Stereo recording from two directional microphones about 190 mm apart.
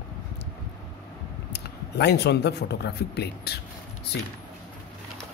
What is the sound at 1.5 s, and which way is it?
Speech, 60° left (ahead or behind).